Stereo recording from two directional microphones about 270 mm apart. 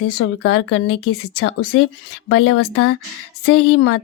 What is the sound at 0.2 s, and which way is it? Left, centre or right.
Speech, left.